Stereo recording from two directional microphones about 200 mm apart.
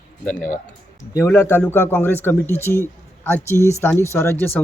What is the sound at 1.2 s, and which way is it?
Speech, 10° left (ahead or behind).